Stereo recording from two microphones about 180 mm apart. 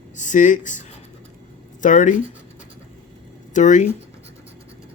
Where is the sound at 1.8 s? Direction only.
45° left (ahead or behind).